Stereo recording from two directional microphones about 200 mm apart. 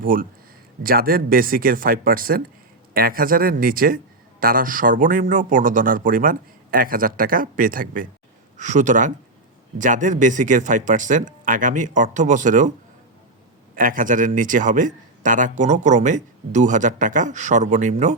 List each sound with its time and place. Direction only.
0.0 s a man's voice: 45° right (ahead or behind)
13.7 s a man's voice: 45° right (ahead or behind)